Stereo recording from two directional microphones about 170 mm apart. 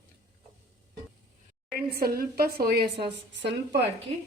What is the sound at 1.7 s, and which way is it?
A woman's voice, 65° right (ahead or behind).